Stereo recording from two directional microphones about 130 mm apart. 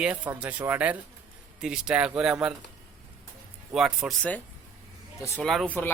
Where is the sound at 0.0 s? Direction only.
10° right (ahead or behind).